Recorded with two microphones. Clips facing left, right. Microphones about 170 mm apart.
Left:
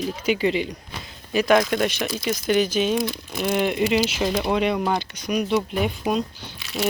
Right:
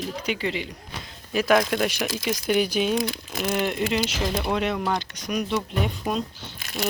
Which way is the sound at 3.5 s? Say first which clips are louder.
Left 4 dB; 5° left (ahead or behind).